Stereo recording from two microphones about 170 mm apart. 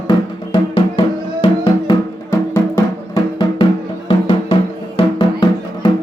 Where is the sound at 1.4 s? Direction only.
20° left (ahead or behind).